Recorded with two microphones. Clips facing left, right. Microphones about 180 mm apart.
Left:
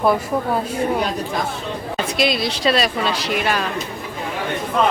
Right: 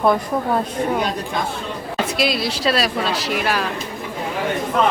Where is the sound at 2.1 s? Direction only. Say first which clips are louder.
Left 2 dB; 5° right (ahead or behind).